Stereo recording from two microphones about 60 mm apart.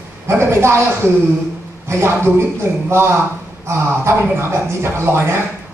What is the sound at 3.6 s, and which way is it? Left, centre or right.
A woman's voice, right.